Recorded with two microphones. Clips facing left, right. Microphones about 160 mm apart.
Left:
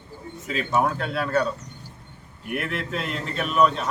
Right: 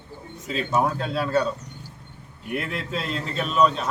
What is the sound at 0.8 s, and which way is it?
Speech, 15° right (ahead or behind).